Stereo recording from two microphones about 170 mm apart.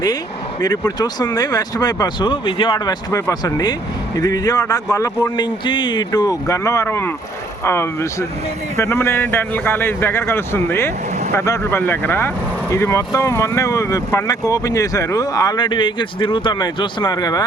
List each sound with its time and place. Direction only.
0.6 s speech: 25° left (ahead or behind)